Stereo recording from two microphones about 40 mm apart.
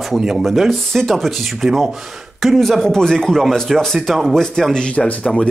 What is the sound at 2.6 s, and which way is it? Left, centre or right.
A man's voice, centre.